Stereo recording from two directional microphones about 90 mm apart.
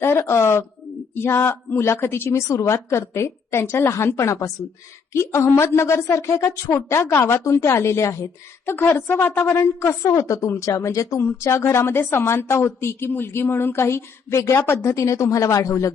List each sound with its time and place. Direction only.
0.0 s a man's voice: 30° left (ahead or behind)